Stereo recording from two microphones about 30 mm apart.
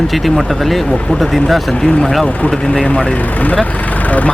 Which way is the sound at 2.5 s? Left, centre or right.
Centre.